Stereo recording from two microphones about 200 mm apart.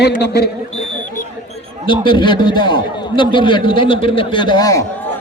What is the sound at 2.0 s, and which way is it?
A man's voice, 25° left (ahead or behind).